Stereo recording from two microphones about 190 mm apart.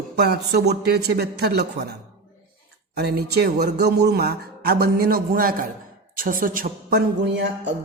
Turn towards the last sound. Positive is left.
turn(degrees=-65)  # may be behind; listen again after turning